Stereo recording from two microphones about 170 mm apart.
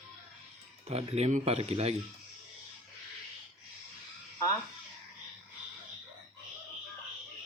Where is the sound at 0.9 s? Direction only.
40° right (ahead or behind).